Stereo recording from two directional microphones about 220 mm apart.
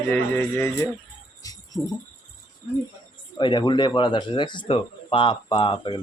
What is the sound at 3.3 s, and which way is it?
Speech, 20° left (ahead or behind).